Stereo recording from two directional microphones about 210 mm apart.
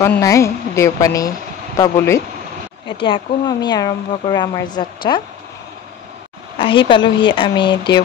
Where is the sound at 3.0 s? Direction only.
20° left (ahead or behind).